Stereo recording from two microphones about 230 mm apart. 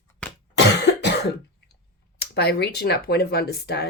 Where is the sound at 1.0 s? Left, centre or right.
Left.